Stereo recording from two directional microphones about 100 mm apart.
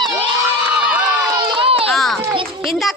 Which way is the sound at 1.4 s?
60° right (ahead or behind).